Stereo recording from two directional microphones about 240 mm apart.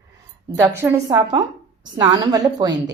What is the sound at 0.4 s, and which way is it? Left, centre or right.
A woman's voice, centre.